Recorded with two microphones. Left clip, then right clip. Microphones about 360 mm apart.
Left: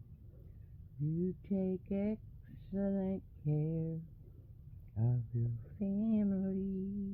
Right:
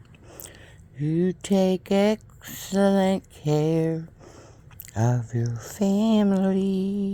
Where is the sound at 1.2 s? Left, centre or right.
Right.